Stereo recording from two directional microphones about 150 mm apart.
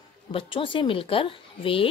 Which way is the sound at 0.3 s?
35° left (ahead or behind).